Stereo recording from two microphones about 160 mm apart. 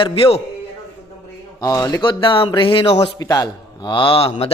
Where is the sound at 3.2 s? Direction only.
25° left (ahead or behind).